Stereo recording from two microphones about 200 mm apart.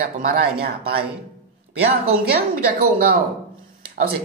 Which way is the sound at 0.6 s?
50° right (ahead or behind).